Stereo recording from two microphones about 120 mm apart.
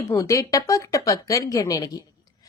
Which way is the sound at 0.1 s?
25° left (ahead or behind).